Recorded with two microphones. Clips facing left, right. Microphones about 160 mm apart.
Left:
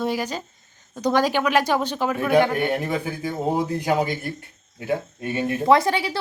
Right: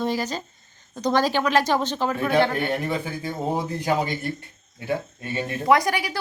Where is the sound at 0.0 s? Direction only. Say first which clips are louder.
Even; 10° left (ahead or behind).